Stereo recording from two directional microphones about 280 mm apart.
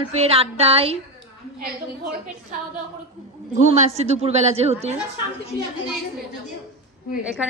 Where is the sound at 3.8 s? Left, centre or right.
Right.